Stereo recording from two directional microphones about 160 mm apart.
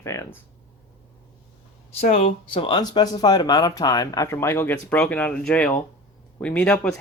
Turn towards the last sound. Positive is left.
turn(degrees=5)  # may be behind; listen again after turning